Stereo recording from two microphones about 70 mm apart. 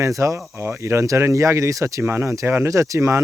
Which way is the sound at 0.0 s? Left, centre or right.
Right.